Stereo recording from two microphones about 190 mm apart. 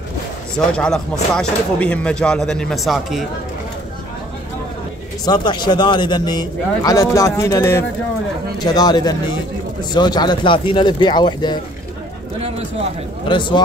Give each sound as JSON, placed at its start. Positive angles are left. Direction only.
{"t": 0.6, "sound": "speech", "side_deg": 5}
{"t": 5.2, "sound": "a man's voice", "side_deg": 20}
{"t": 12.4, "sound": "speech", "side_deg": -35}
{"t": 13.3, "sound": "a man's voice", "side_deg": 25}